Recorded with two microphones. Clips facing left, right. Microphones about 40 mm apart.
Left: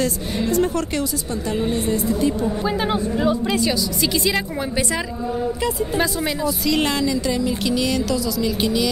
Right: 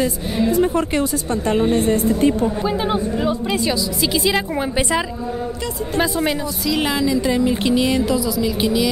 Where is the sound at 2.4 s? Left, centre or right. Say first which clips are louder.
Right 1 dB; centre.